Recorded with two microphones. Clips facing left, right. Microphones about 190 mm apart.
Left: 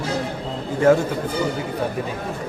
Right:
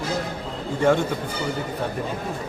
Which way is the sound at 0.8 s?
5° left (ahead or behind).